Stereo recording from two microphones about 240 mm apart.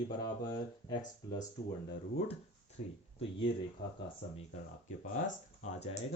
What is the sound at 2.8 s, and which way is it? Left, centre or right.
Speech, left.